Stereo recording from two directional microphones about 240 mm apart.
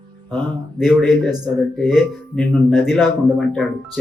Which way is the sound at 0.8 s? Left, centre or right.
Centre.